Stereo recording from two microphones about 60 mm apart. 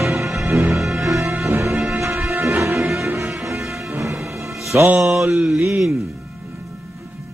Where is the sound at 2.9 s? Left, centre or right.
Right.